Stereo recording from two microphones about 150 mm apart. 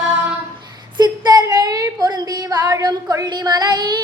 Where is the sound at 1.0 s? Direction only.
25° right (ahead or behind).